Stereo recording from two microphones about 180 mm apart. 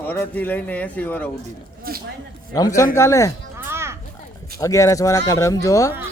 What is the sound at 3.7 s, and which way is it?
Children playing, 15° right (ahead or behind).